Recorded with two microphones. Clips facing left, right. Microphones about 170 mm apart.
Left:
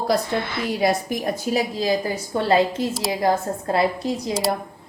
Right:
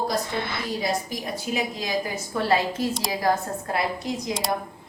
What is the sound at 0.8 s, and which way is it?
Speech, 60° left (ahead or behind).